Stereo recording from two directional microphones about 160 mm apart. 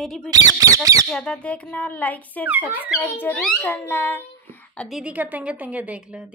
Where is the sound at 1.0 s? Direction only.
5° left (ahead or behind).